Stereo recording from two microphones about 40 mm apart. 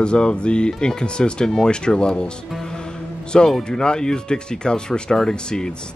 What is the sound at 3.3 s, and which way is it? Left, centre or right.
Speech, centre.